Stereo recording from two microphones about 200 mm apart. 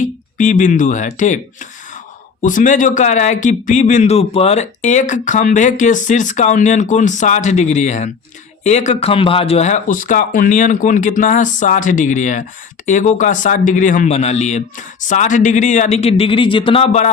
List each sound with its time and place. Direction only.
0.0 s speech: 40° left (ahead or behind)
2.4 s speech: 40° left (ahead or behind)